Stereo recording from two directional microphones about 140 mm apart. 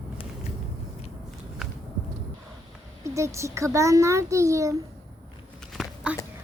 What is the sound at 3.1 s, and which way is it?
A child's voice, 20° right (ahead or behind).